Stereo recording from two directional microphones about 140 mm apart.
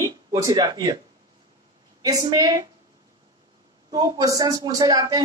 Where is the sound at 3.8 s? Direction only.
25° right (ahead or behind).